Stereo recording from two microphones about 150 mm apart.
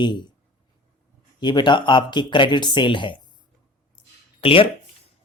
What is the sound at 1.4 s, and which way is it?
Speech, 30° left (ahead or behind).